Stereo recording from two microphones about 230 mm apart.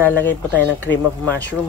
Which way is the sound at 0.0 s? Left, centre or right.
Centre.